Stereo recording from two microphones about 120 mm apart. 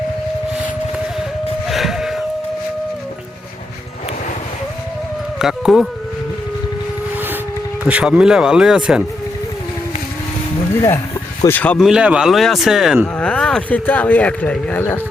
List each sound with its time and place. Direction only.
1.7 s a sound: 5° right (ahead or behind)
5.4 s speech: 5° right (ahead or behind)
7.9 s speech: 10° right (ahead or behind)
11.4 s speech: 15° left (ahead or behind)
11.8 s speech: 5° right (ahead or behind)
13.1 s speech: 10° left (ahead or behind)